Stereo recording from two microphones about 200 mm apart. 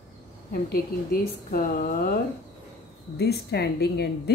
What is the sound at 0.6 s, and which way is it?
Speech, 50° left (ahead or behind).